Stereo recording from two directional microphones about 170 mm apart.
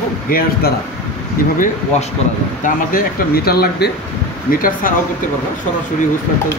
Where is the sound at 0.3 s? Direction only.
65° left (ahead or behind).